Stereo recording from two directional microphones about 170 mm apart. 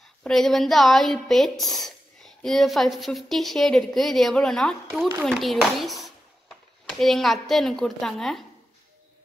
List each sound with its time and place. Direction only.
0.2 s speech: centre (ahead or behind)